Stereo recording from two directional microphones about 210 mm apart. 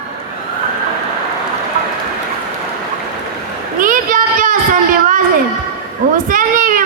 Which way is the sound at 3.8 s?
40° right (ahead or behind).